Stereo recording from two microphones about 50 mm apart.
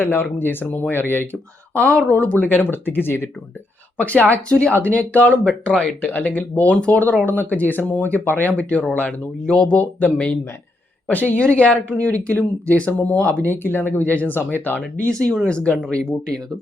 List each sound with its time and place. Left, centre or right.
0.0 s speech: left
1.8 s speech: left
3.9 s speech: left
5.4 s speech: centre
6.0 s speech: left
9.5 s speech: centre
9.7 s speech: left
11.3 s speech: left
13.4 s speech: left
15.0 s speech: centre